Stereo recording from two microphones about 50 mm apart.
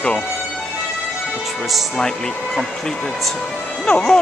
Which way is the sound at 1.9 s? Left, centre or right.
Centre.